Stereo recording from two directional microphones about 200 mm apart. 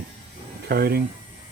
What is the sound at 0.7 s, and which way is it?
Speech, 50° right (ahead or behind).